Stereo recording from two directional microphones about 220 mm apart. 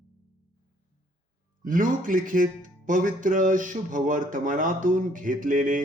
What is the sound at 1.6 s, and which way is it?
Speech, 35° right (ahead or behind).